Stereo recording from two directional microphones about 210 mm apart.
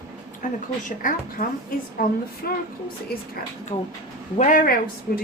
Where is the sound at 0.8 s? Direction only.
40° left (ahead or behind).